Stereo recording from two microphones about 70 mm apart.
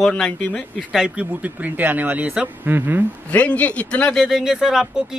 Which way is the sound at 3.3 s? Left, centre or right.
Centre.